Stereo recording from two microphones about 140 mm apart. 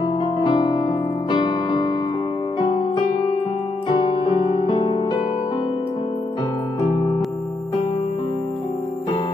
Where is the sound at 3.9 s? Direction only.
30° left (ahead or behind).